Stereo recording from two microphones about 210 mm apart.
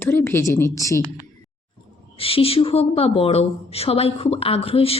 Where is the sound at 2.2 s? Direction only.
25° left (ahead or behind).